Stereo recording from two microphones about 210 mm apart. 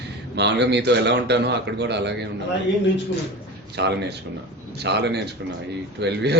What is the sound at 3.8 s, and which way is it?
Speech, 55° right (ahead or behind).